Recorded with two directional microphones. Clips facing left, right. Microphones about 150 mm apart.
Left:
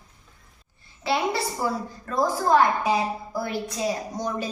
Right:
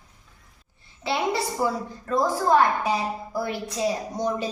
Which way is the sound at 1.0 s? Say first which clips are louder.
Even; 20° right (ahead or behind).